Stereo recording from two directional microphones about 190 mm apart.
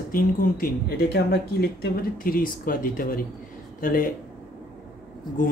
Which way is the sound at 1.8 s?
50° left (ahead or behind).